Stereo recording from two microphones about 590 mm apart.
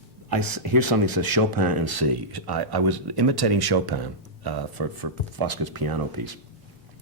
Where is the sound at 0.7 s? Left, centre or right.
Right.